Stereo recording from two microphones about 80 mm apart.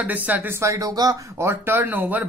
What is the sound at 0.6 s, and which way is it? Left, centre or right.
Speech, right.